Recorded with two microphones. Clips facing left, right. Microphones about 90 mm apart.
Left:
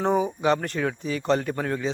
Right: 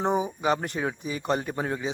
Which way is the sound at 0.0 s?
15° right (ahead or behind).